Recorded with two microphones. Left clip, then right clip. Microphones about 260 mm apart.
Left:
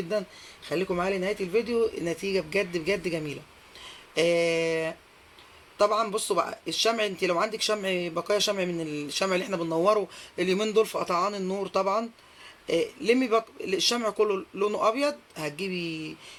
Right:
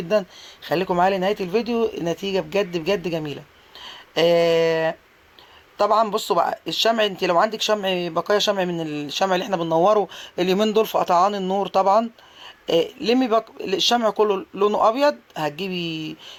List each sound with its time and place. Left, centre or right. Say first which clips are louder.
0.1 s speech: right 13 dB; right